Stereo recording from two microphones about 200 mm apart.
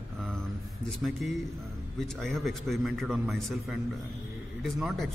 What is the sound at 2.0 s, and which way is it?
A man's voice, centre (ahead or behind).